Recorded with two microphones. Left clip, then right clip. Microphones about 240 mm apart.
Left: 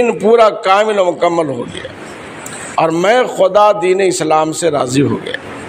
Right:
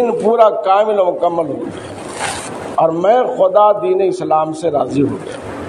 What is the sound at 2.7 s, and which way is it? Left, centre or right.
A man's voice, left.